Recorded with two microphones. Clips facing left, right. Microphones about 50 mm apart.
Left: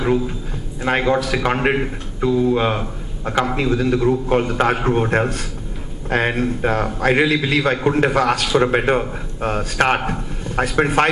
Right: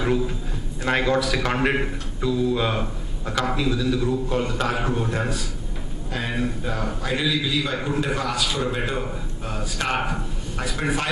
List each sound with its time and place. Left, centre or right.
0.8 s a man's voice: left
2.2 s a man's voice: left